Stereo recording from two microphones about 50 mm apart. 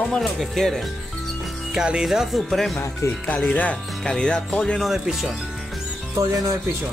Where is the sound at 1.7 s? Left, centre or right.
Centre.